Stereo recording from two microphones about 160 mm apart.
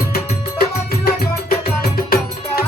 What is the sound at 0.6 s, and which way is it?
Music, 65° left (ahead or behind).